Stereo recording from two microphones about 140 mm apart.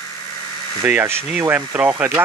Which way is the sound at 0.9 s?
15° right (ahead or behind).